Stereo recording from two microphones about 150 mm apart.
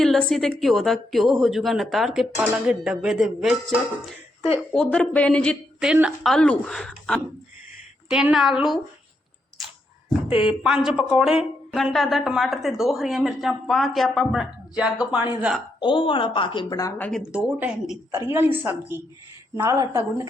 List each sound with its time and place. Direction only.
0.0 s a woman's voice: 5° left (ahead or behind)
5.8 s a woman's voice: 5° right (ahead or behind)
10.2 s a woman's voice: 40° left (ahead or behind)
10.8 s a woman's voice: 5° right (ahead or behind)
15.8 s a woman's voice: 35° left (ahead or behind)
17.0 s a woman's voice: centre (ahead or behind)
18.1 s a woman's voice: 15° right (ahead or behind)